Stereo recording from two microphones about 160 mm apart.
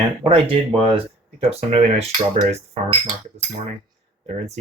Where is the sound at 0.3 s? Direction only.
35° right (ahead or behind).